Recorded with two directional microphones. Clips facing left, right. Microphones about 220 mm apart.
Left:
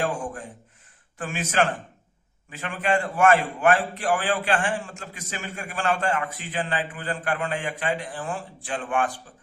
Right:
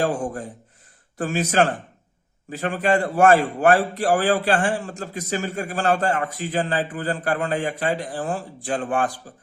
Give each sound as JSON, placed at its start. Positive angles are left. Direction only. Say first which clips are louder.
{"t": 0.0, "sound": "a man's voice", "louder": "right 5 dB", "side_deg": -35}